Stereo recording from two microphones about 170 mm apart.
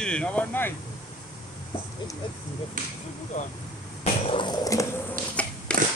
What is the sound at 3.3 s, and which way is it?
Speech, 45° left (ahead or behind).